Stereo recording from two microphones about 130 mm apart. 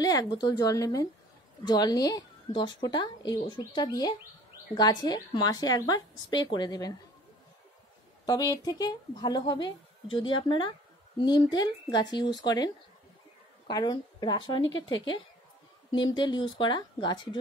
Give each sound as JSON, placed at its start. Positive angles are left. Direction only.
{"t": 0.0, "sound": "a woman's voice", "side_deg": 30}
{"t": 8.3, "sound": "a woman's voice", "side_deg": 30}